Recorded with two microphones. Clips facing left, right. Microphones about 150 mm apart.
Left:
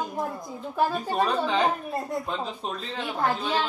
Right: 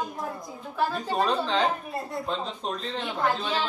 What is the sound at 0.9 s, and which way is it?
Speech, 10° left (ahead or behind).